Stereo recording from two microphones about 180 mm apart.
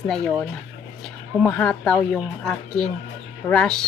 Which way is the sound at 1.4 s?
5° left (ahead or behind).